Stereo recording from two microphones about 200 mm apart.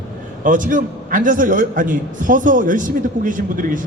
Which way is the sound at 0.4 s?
40° right (ahead or behind).